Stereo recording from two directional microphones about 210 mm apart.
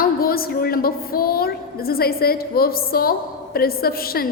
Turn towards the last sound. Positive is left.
turn(degrees=45)  # may be behind; listen again after turning